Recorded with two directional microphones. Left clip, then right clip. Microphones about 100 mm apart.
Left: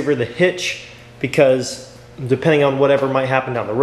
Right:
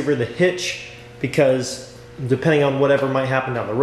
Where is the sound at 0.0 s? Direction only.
15° left (ahead or behind).